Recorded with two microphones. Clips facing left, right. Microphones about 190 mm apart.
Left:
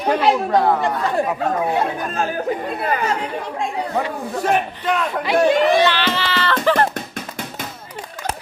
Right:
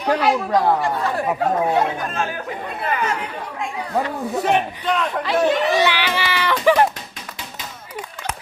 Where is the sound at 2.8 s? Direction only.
35° left (ahead or behind).